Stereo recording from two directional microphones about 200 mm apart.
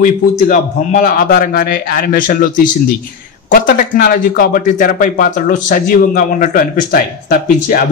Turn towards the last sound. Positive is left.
turn(degrees=45)  # may be behind; listen again after turning